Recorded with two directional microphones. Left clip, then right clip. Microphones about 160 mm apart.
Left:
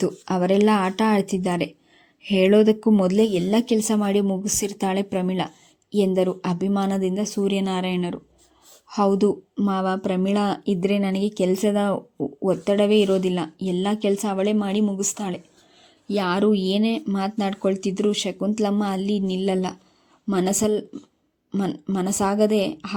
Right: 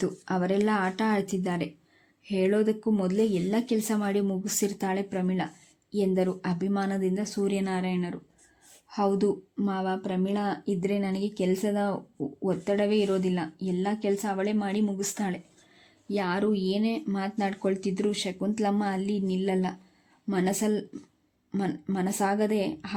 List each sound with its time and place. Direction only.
0.0 s speech: 30° left (ahead or behind)